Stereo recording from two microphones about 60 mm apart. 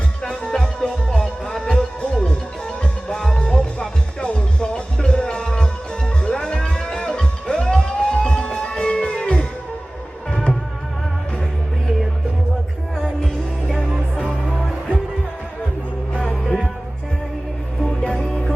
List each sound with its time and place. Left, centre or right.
0.2 s music: centre
13.0 s music: centre
13.9 s music: centre
16.4 s music: centre
17.8 s music: centre